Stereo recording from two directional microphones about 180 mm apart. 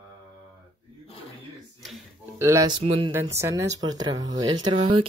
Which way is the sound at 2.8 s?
30° right (ahead or behind).